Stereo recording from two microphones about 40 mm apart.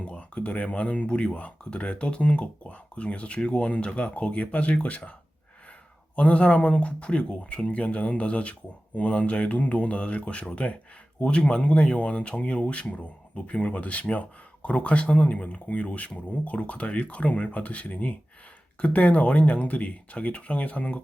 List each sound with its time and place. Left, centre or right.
0.0 s speech: left
6.1 s speech: left